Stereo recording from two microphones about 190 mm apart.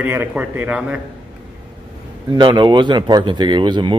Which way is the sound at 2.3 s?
25° right (ahead or behind).